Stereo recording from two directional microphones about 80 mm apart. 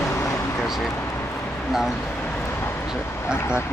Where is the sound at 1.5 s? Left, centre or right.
Centre.